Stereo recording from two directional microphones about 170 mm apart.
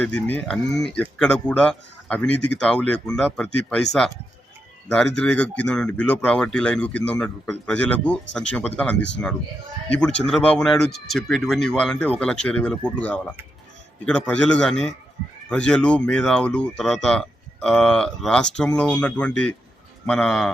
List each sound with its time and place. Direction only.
0.0 s a man's voice: 10° left (ahead or behind)
4.9 s speech: 5° left (ahead or behind)
9.0 s speech: 90° left
9.9 s a man's voice: 5° left (ahead or behind)